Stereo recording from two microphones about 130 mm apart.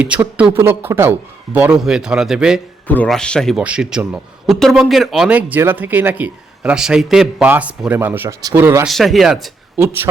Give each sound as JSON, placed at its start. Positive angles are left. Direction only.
{"t": 0.0, "sound": "a man's voice", "side_deg": -10}
{"t": 2.8, "sound": "a man's voice", "side_deg": 15}
{"t": 3.6, "sound": "a man's voice", "side_deg": -5}
{"t": 8.9, "sound": "speech", "side_deg": 0}